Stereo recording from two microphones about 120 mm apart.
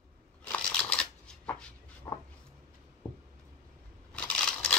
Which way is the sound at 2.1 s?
25° left (ahead or behind).